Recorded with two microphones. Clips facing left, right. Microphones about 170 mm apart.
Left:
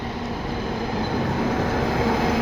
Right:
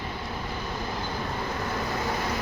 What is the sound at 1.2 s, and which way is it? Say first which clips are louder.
Vehicle: left 9 dB; 85° left.